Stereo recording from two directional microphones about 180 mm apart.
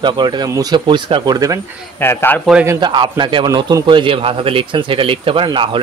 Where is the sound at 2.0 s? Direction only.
10° left (ahead or behind).